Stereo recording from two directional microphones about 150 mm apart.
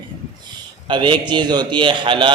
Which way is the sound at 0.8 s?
30° right (ahead or behind).